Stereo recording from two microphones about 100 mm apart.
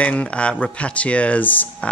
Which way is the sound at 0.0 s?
10° left (ahead or behind).